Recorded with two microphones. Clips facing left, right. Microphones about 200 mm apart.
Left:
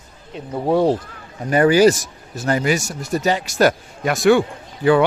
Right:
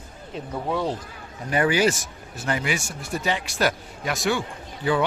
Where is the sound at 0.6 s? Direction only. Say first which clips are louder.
Left 11 dB; 45° left (ahead or behind).